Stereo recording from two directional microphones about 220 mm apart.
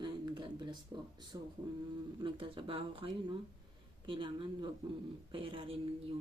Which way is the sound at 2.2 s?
25° right (ahead or behind).